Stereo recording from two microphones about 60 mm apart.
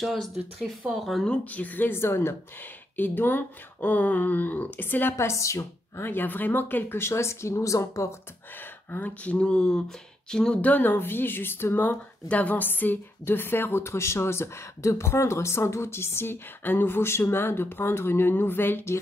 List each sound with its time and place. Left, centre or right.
0.0 s speech: centre
1.2 s speech: left
2.0 s speech: left
3.0 s a woman's voice: left
5.1 s a woman's voice: left
5.9 s speech: left
8.9 s speech: left
10.6 s a woman's voice: left